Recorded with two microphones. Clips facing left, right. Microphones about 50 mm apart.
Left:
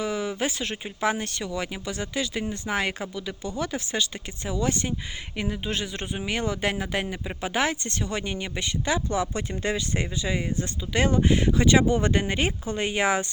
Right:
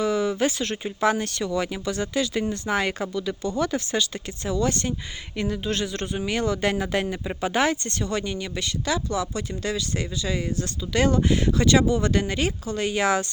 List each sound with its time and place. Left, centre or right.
0.0 s speech: centre
8.2 s speech: left
11.9 s speech: left